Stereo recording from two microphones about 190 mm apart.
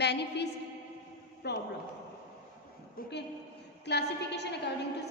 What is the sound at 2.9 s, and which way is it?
A woman's voice, 60° left (ahead or behind).